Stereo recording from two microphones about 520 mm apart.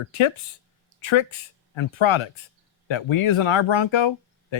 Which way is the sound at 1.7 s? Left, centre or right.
Left.